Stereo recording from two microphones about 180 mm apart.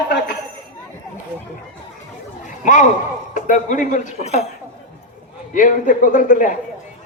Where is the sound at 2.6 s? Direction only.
45° left (ahead or behind).